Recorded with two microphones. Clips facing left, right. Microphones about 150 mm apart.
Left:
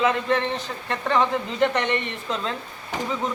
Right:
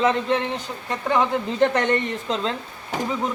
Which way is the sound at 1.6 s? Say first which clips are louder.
Right 3 dB; 40° right (ahead or behind).